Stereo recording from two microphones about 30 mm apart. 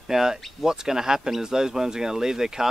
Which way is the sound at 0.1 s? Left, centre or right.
Centre.